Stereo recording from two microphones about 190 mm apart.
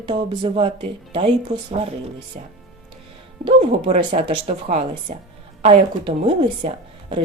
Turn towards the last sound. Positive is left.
turn(degrees=-30)  # may be behind; listen again after turning